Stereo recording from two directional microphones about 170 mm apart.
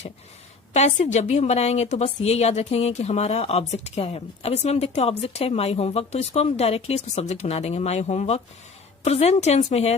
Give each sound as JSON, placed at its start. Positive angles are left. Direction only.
{"t": 0.7, "sound": "speech", "side_deg": 40}